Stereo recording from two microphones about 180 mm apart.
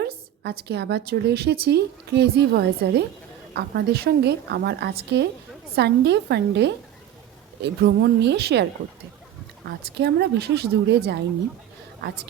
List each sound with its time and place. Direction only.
0.0 s a woman's voice: 65° right (ahead or behind)
10.0 s a woman's voice: 70° right (ahead or behind)